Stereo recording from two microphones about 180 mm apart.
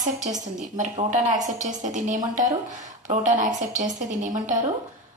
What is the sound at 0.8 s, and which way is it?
A woman's voice, 45° right (ahead or behind).